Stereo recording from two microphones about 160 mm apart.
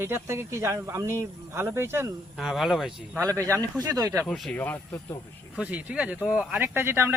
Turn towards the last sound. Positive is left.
turn(degrees=-15)  # may be behind; listen again after turning